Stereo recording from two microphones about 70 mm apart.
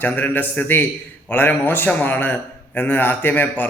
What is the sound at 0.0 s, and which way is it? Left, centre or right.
A man's voice, left.